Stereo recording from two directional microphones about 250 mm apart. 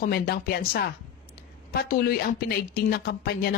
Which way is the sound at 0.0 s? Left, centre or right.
Left.